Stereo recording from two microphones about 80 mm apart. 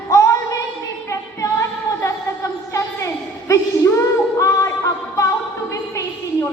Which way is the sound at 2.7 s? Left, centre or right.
Left.